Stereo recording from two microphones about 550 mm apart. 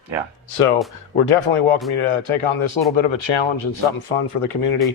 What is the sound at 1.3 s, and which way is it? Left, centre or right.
Speech, left.